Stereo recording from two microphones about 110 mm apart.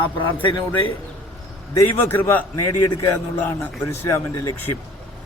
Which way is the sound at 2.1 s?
15° left (ahead or behind).